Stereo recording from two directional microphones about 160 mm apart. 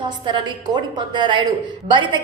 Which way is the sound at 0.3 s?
30° right (ahead or behind).